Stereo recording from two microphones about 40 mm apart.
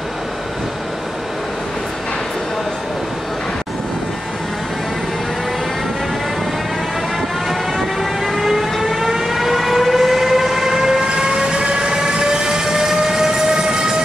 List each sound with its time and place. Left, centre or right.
8.0 s vehicle: centre
11.1 s train: centre